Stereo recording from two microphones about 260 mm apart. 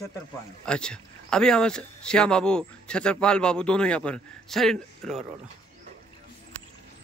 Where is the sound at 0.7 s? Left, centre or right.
Centre.